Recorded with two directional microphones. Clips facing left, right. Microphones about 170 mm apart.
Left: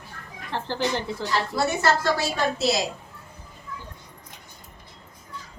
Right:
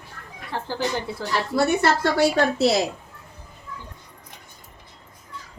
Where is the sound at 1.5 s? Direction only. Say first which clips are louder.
Right 4 dB; 65° right (ahead or behind).